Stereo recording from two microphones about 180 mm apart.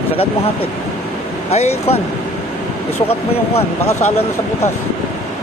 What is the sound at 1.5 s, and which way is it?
Speech, 35° left (ahead or behind).